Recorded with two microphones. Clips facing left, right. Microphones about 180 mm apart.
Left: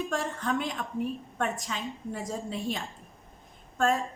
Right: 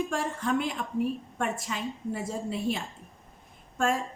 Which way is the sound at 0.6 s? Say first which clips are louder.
Right 3 dB; 10° right (ahead or behind).